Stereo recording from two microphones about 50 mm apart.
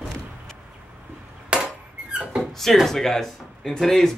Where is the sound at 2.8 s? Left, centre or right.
Centre.